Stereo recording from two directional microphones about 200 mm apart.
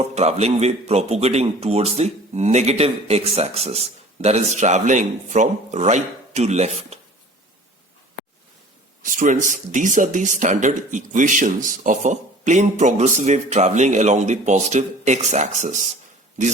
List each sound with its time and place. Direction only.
0.0 s a man's voice: 30° right (ahead or behind)
9.0 s a man's voice: 40° right (ahead or behind)